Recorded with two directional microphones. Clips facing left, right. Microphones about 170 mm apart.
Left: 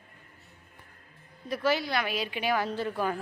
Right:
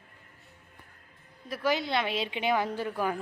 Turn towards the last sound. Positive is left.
turn(degrees=-10)  # may be behind; listen again after turning